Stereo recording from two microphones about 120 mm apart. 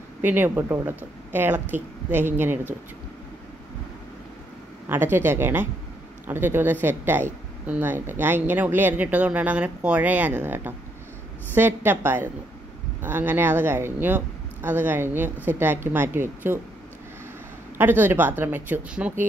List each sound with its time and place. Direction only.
0.2 s speech: 15° right (ahead or behind)
4.8 s speech: 20° right (ahead or behind)
17.7 s speech: 15° right (ahead or behind)